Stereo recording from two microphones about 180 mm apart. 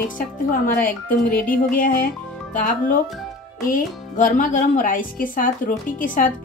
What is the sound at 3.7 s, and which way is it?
Speech, 45° left (ahead or behind).